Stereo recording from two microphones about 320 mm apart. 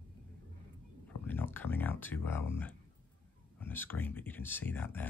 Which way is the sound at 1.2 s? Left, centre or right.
Centre.